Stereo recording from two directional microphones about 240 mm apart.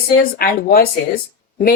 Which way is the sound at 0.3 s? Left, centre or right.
Left.